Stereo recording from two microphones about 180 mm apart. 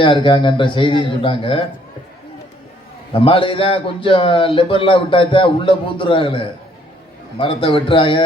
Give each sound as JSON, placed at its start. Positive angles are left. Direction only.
{"t": 0.0, "sound": "a man's voice", "side_deg": 30}
{"t": 3.1, "sound": "a man's voice", "side_deg": 30}